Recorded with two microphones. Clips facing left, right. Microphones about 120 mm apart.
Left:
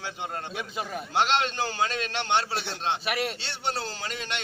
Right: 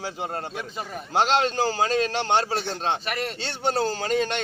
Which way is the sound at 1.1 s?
40° right (ahead or behind).